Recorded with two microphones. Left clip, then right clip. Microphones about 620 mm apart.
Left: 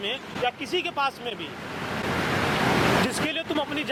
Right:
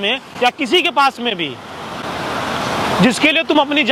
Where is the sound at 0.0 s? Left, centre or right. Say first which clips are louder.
Right 11 dB; right.